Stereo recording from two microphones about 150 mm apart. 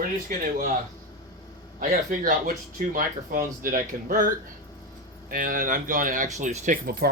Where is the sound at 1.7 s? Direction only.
65° right (ahead or behind); by 7.1 s 85° right.